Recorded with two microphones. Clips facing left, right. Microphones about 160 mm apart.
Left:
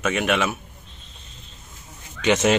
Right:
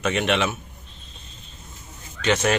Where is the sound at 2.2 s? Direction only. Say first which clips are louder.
Left 2 dB; 20° left (ahead or behind).